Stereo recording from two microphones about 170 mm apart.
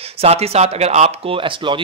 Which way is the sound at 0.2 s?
35° right (ahead or behind).